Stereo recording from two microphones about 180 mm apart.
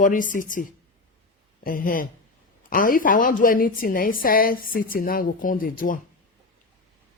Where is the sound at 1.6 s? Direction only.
50° left (ahead or behind).